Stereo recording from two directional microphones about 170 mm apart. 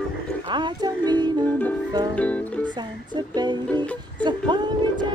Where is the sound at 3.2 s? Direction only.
25° right (ahead or behind).